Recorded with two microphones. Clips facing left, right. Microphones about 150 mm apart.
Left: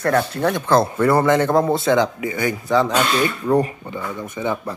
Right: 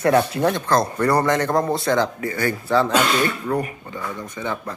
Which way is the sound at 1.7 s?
20° left (ahead or behind).